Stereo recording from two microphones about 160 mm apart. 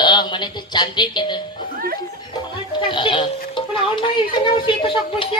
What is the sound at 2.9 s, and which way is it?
Speech, 30° left (ahead or behind).